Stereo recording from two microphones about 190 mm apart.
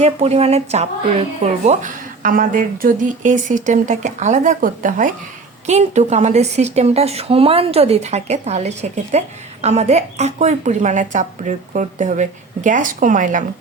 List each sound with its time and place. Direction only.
0.0 s a woman's voice: 35° right (ahead or behind)